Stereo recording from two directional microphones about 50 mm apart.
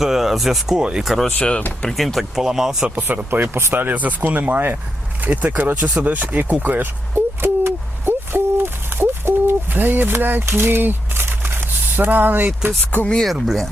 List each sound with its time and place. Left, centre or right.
0.0 s speech: centre
0.8 s speech: centre
1.0 s speech: centre
1.4 s speech: left
1.9 s speech: centre
2.9 s speech: right
3.2 s speech: right
7.1 s owl: right
12.9 s speech: left
13.2 s speech: centre